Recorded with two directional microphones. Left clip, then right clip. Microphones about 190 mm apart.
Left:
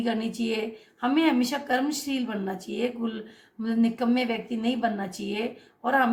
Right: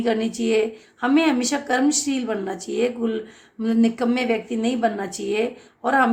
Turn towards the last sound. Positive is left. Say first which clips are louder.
# right 4 dB
turn(degrees=-35)  # may be behind; listen again after turning